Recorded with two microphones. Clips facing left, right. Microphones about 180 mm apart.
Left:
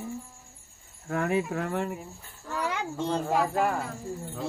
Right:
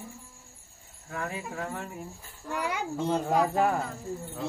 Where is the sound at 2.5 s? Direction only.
10° right (ahead or behind).